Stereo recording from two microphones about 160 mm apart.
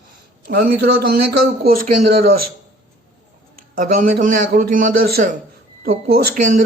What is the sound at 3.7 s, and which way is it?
Speech, 55° right (ahead or behind).